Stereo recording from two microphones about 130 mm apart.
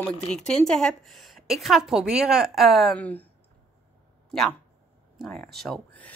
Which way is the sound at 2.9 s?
10° left (ahead or behind).